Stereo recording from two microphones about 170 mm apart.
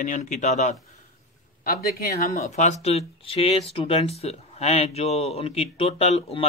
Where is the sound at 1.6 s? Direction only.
60° left (ahead or behind).